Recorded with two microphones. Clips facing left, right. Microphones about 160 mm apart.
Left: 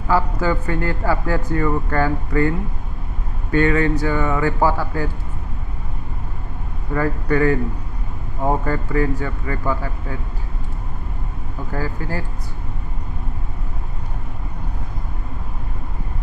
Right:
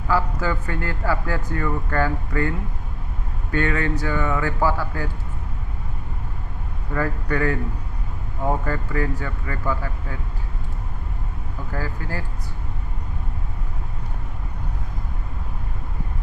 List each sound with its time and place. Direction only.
0.1 s speech: 25° left (ahead or behind)
3.5 s speech: 25° left (ahead or behind)
6.9 s speech: 25° left (ahead or behind)
8.4 s speech: 35° left (ahead or behind)
8.7 s speech: 25° left (ahead or behind)
11.7 s speech: 20° left (ahead or behind)